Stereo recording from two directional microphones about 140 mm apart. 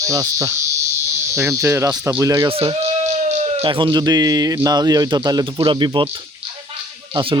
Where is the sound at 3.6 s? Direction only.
35° right (ahead or behind).